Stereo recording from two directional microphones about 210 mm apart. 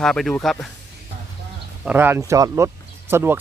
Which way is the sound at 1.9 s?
10° right (ahead or behind).